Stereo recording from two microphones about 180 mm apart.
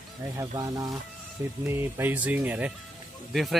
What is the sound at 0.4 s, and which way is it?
A man's voice, 20° right (ahead or behind).